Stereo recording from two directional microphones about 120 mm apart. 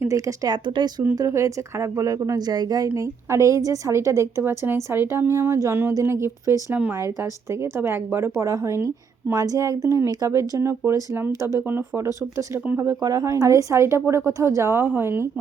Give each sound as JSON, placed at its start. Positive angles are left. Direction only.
{"t": 0.0, "sound": "speech", "side_deg": -25}
{"t": 0.4, "sound": "speech", "side_deg": -35}
{"t": 13.0, "sound": "speech", "side_deg": -30}